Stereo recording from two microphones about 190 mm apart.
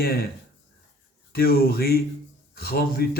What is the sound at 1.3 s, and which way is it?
Speech, 55° left (ahead or behind).